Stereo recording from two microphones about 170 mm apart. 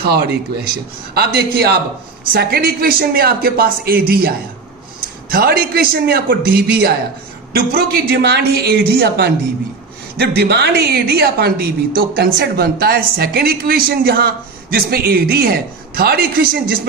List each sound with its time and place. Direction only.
1.1 s speech: 70° right (ahead or behind)
2.3 s speech: 65° right (ahead or behind)
5.3 s speech: 65° right (ahead or behind)